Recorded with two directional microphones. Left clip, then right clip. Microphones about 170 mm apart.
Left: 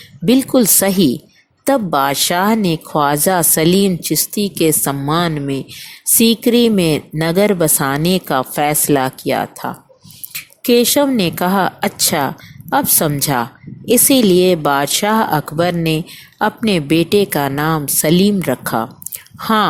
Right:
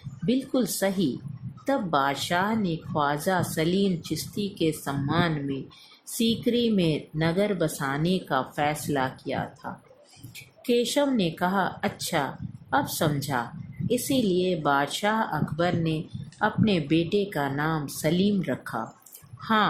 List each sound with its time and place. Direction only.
0.3 s speech: 55° left (ahead or behind)